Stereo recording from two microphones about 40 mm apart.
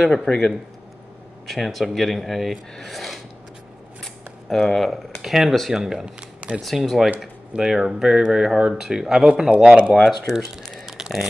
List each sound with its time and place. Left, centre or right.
0.0 s speech: centre
1.5 s speech: centre
4.0 s a sound: centre
5.2 s speech: centre
6.6 s speech: centre
7.5 s speech: centre
9.5 s speech: right
9.9 s speech: centre
10.7 s a sound: centre